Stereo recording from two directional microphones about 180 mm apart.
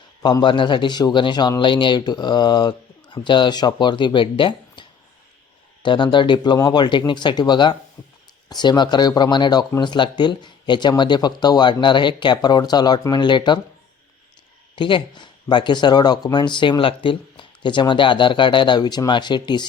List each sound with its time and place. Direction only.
0.2 s speech: 25° left (ahead or behind)
14.8 s speech: 25° left (ahead or behind)